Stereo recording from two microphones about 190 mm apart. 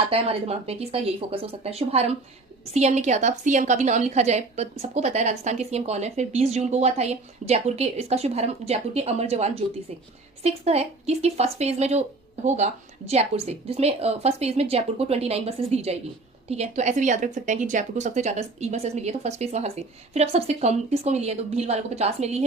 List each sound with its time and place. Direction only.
0.0 s a woman's voice: 30° right (ahead or behind)